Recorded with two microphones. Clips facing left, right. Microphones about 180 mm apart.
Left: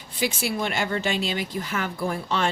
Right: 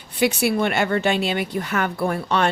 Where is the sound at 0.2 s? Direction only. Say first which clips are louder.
Right 7 dB; 65° right (ahead or behind).